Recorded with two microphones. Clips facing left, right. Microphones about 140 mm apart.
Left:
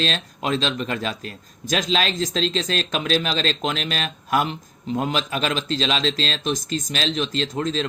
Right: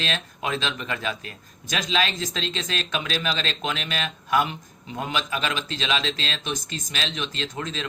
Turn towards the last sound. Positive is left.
turn(degrees=35)  # may be behind; listen again after turning